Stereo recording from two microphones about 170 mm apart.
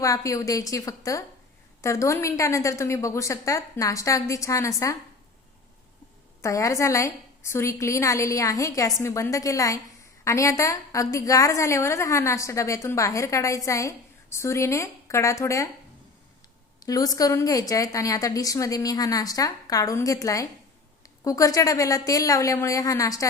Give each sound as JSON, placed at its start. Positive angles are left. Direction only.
{"t": 0.0, "sound": "a woman's voice", "side_deg": 20}
{"t": 6.4, "sound": "a woman's voice", "side_deg": 20}
{"t": 16.8, "sound": "a woman's voice", "side_deg": 20}